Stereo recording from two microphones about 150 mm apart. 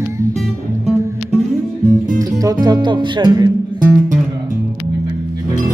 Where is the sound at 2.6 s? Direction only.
30° right (ahead or behind).